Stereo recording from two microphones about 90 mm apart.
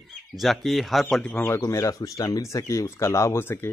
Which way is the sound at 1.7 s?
35° left (ahead or behind).